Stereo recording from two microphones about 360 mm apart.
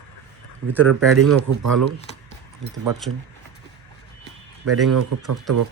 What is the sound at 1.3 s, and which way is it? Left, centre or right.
Speech, right.